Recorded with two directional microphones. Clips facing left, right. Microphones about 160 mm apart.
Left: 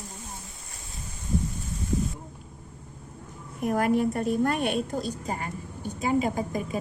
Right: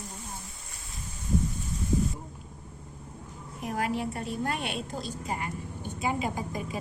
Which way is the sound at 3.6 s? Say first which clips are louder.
Left 7 dB; 50° left (ahead or behind).